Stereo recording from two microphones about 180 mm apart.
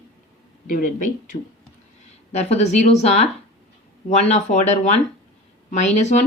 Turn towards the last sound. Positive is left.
turn(degrees=40)  # may be behind; listen again after turning